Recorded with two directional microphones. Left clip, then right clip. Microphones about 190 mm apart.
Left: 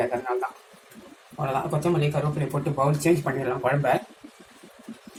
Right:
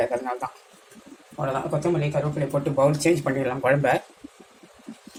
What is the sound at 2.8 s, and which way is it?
Speech, 35° right (ahead or behind).